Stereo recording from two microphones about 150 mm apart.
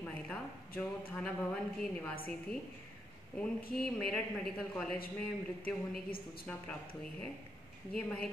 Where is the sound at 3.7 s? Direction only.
5° left (ahead or behind).